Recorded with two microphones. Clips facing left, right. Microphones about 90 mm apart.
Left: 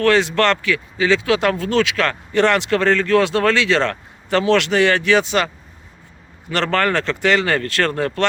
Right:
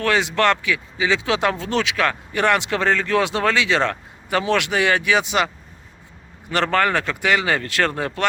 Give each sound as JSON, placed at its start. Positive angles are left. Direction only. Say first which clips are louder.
{"t": 0.0, "sound": "speech", "louder": "left 3 dB", "side_deg": -15}
{"t": 6.5, "sound": "speech", "louder": "left 1 dB", "side_deg": -15}